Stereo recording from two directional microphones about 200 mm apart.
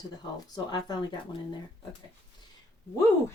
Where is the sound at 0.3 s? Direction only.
20° left (ahead or behind).